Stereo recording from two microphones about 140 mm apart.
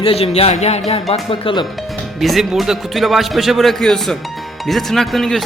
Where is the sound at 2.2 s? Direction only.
Centre (ahead or behind).